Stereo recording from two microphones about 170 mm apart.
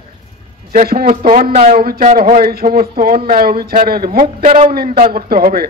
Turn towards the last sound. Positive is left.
turn(degrees=-60)  # may be behind; listen again after turning